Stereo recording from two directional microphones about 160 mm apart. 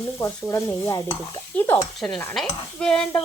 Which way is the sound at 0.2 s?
20° left (ahead or behind).